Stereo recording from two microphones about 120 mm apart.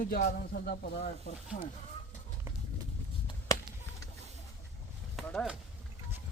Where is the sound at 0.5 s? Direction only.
90° left.